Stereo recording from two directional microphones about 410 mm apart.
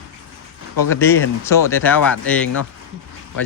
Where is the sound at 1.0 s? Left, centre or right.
Centre.